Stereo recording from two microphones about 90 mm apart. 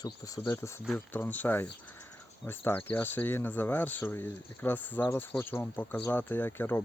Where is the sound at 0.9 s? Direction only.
20° left (ahead or behind).